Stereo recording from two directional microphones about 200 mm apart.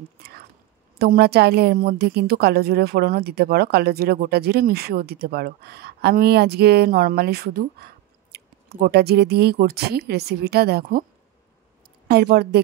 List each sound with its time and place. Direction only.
0.9 s a woman's voice: 50° right (ahead or behind)
12.1 s a woman's voice: 50° right (ahead or behind)